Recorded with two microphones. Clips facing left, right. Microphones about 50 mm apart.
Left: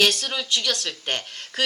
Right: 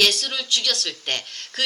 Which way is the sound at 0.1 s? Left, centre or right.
Centre.